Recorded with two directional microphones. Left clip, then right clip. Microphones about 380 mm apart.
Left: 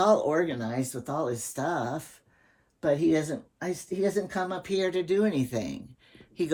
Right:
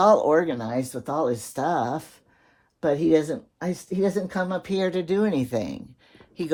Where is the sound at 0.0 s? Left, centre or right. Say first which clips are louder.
Right 5 dB; centre.